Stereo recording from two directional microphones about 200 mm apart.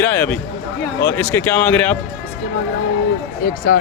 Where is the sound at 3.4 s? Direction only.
50° left (ahead or behind).